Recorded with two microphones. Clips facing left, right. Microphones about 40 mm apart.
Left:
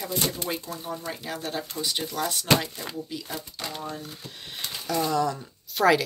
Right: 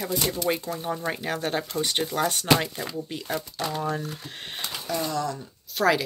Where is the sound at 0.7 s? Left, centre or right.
Right.